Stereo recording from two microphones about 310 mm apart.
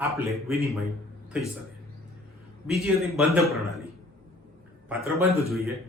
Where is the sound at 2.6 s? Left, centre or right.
Centre.